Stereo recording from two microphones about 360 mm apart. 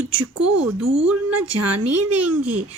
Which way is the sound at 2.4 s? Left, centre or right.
Centre.